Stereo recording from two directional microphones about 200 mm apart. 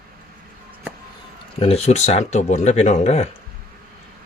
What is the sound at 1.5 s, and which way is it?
Speech, 30° left (ahead or behind).